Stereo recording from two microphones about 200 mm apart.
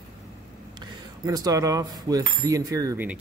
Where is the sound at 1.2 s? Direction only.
20° right (ahead or behind).